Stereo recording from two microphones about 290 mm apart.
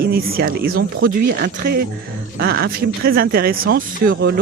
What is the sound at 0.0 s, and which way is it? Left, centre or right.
Speech, right.